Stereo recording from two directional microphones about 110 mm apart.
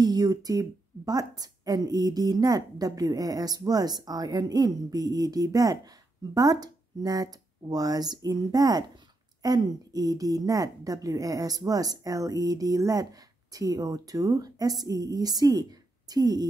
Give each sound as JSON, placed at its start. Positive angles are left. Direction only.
{"t": 0.0, "sound": "a woman's voice", "side_deg": -35}